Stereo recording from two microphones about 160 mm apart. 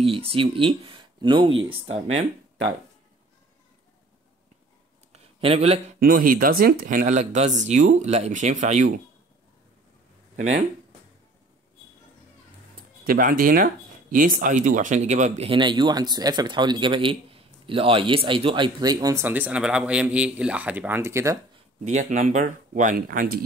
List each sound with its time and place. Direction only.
0.0 s speech: 35° right (ahead or behind)
5.1 s a sound: 40° right (ahead or behind)
5.9 s speech: 60° right (ahead or behind)
10.3 s speech: 45° right (ahead or behind)
13.0 s speech: 60° right (ahead or behind); by 19.2 s 25° right (ahead or behind)
19.2 s speech: 10° right (ahead or behind)
21.8 s speech: 50° right (ahead or behind)